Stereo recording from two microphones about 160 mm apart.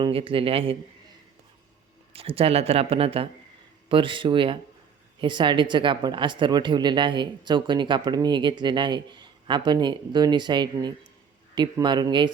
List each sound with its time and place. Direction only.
0.0 s speech: 35° right (ahead or behind)
2.1 s speech: 35° right (ahead or behind)